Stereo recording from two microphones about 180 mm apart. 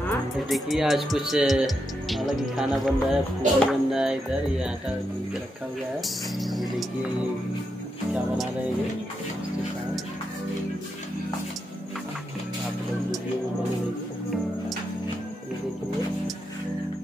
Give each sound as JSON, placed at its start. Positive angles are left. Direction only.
{"t": 0.5, "sound": "speech", "side_deg": 0}
{"t": 5.9, "sound": "speech", "side_deg": 0}